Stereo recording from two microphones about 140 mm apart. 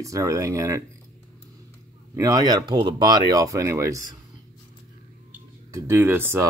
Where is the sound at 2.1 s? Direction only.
25° right (ahead or behind).